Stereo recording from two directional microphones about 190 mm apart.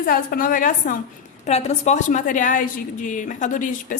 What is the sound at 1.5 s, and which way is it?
A woman's voice, 35° left (ahead or behind).